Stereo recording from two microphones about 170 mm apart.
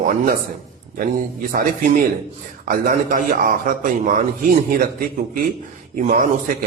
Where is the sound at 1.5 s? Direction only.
50° right (ahead or behind).